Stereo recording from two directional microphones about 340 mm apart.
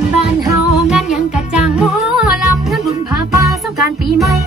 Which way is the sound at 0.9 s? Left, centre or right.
Centre.